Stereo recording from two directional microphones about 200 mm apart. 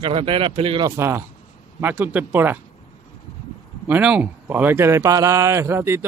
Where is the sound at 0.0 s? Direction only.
25° right (ahead or behind).